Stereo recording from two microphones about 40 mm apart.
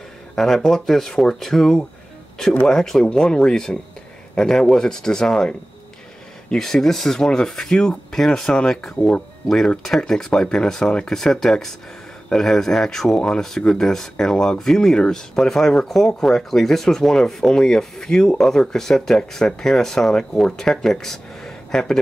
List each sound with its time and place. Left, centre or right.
0.4 s speech: centre